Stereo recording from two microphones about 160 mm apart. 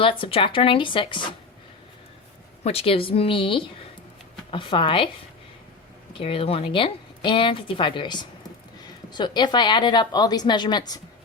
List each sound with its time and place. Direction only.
0.0 s speech: 35° left (ahead or behind)
2.6 s speech: 35° left (ahead or behind)
6.1 s a woman's voice: 35° left (ahead or behind)